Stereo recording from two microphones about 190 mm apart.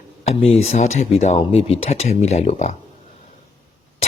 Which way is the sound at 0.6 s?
35° left (ahead or behind).